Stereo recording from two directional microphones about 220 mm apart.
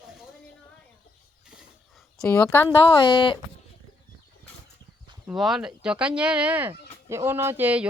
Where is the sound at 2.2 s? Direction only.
10° left (ahead or behind).